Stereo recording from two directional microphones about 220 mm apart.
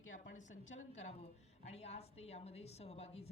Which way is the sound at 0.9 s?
30° left (ahead or behind).